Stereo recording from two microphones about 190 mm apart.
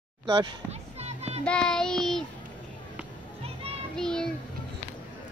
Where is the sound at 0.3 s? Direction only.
30° right (ahead or behind).